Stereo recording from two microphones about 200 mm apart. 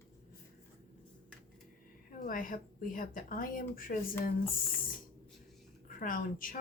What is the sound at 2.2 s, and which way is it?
Speech, 45° left (ahead or behind).